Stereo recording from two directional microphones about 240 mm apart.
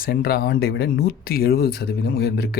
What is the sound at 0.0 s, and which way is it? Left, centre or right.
Speech, left.